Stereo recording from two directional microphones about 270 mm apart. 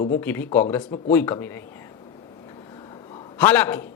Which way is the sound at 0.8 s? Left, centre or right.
Left.